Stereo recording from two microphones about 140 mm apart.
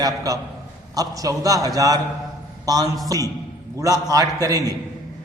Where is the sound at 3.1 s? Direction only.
25° right (ahead or behind).